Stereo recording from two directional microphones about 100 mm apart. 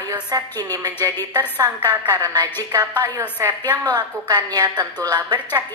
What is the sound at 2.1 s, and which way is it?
A woman's voice, 45° right (ahead or behind).